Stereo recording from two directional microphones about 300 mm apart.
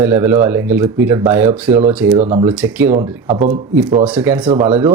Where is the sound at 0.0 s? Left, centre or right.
Centre.